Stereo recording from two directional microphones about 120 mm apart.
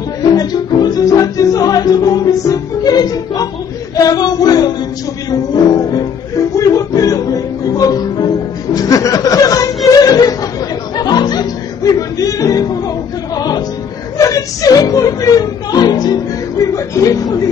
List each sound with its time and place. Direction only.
0.2 s music: 35° left (ahead or behind)
3.9 s a sound: 30° left (ahead or behind)
5.3 s music: 35° left (ahead or behind)
8.7 s snicker: 30° left (ahead or behind)
11.0 s music: 35° left (ahead or behind)